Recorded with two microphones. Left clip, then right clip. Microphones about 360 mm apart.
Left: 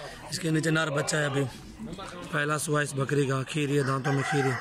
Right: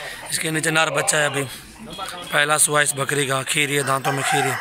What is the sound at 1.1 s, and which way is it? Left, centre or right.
Speech, right.